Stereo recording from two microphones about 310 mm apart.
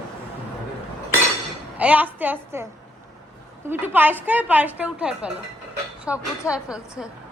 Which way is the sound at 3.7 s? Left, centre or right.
Centre.